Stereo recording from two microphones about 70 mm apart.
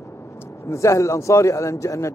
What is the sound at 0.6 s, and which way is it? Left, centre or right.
A man's voice, left.